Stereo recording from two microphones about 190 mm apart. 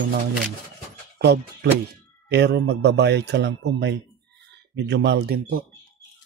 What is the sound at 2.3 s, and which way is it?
Speech, 60° right (ahead or behind).